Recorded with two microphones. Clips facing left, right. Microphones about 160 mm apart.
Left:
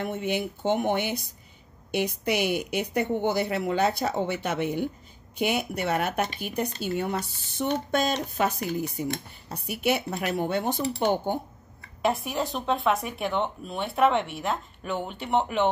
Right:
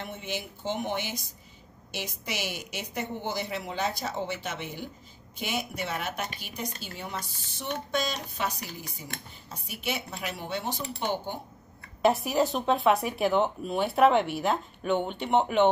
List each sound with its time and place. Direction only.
0.0 s speech: 60° left (ahead or behind)
12.0 s speech: centre (ahead or behind)